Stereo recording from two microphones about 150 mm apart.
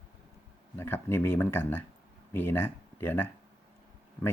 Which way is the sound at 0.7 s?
15° left (ahead or behind).